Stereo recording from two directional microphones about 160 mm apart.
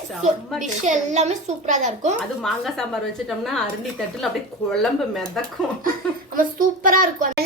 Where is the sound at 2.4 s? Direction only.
Centre (ahead or behind).